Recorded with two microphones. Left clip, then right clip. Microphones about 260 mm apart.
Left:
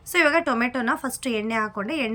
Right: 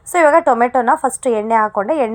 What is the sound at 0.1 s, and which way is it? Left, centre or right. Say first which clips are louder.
A woman's voice: right 9 dB; centre.